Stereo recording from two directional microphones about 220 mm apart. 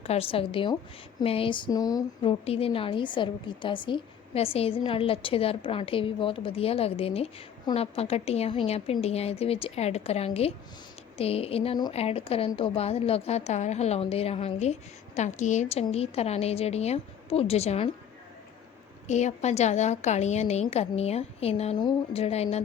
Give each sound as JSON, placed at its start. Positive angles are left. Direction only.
{"t": 0.0, "sound": "a woman's voice", "side_deg": 25}
{"t": 19.0, "sound": "a woman's voice", "side_deg": 30}